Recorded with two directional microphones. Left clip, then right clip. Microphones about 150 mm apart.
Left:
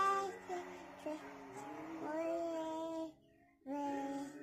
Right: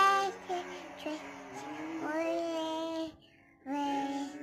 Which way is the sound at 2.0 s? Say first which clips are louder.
Right 6 dB; 5° right (ahead or behind).